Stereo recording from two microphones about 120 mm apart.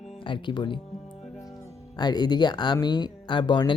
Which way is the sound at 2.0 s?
35° left (ahead or behind).